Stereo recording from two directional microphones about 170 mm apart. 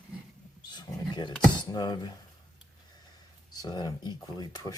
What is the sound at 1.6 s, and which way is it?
Speech, 25° left (ahead or behind).